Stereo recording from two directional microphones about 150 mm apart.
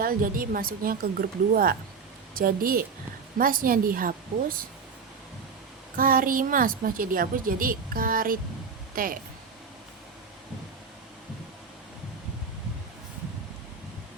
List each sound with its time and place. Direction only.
0.0 s a woman's voice: 70° right (ahead or behind)
6.0 s a woman's voice: 70° right (ahead or behind)